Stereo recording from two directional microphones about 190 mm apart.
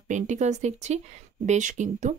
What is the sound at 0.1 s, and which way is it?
Speech, 40° right (ahead or behind).